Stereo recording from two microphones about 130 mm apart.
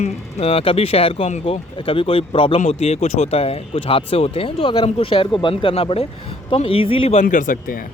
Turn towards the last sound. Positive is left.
turn(degrees=90)